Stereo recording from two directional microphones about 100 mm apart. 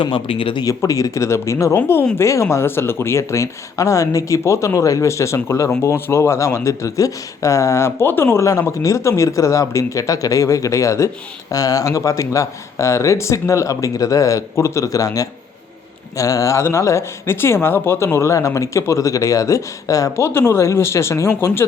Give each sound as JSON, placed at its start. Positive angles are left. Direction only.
{"t": 0.0, "sound": "speech", "side_deg": 60}
{"t": 0.6, "sound": "speech", "side_deg": 35}